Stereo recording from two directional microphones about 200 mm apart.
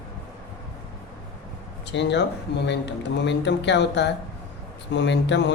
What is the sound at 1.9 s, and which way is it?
A man's voice, 60° left (ahead or behind).